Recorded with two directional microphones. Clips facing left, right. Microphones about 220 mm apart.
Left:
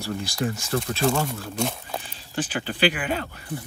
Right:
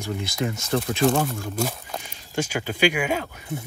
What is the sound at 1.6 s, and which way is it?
Speech, centre (ahead or behind).